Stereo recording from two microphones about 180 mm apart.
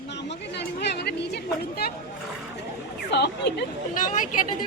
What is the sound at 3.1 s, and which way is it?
Speech, 70° left (ahead or behind).